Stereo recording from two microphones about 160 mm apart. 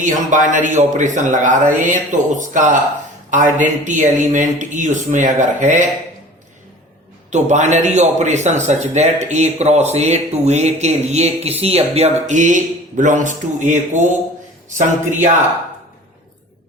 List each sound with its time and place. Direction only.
0.0 s speech: 50° right (ahead or behind)
7.3 s speech: 45° right (ahead or behind)